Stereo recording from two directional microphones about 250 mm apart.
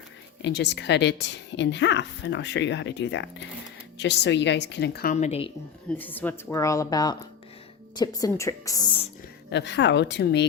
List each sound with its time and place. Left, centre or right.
0.4 s a woman's voice: left
6.0 s a woman's voice: centre
9.5 s a woman's voice: left